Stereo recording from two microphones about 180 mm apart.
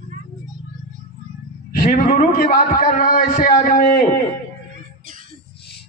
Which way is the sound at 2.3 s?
55° left (ahead or behind).